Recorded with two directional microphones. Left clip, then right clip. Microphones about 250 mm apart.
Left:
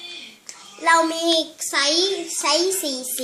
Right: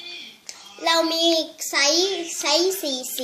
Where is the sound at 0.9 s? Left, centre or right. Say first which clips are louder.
Right 1 dB; centre.